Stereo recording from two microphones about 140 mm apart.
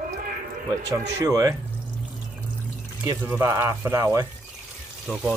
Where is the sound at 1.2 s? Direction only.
25° right (ahead or behind).